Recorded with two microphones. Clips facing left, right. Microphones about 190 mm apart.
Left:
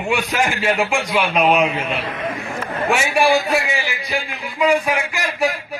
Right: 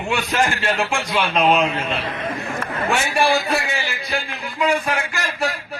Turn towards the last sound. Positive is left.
turn(degrees=10)  # may be behind; listen again after turning